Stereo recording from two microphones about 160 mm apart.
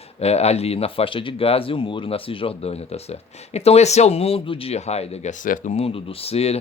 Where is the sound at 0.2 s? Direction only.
40° left (ahead or behind).